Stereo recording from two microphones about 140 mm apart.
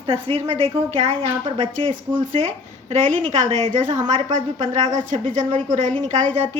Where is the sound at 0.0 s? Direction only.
45° right (ahead or behind).